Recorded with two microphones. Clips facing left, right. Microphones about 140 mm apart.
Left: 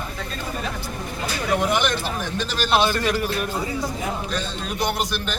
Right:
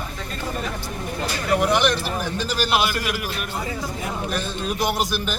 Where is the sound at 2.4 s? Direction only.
10° right (ahead or behind).